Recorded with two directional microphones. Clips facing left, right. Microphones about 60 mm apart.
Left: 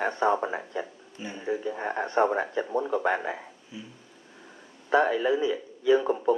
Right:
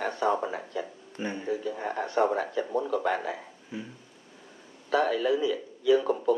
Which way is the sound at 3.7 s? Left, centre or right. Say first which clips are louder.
Right 5 dB; right.